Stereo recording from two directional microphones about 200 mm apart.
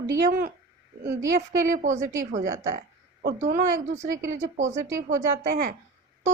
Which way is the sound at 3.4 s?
45° right (ahead or behind).